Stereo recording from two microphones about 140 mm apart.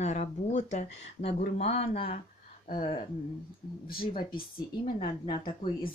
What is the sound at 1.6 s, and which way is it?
Speech, 45° left (ahead or behind).